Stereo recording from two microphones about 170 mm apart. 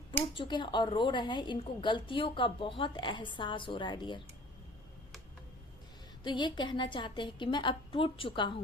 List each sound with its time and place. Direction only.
0.3 s a woman's voice: 25° left (ahead or behind)
6.2 s a woman's voice: 25° left (ahead or behind)